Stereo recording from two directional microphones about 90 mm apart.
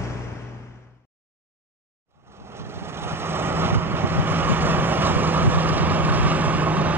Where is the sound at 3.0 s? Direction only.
25° right (ahead or behind).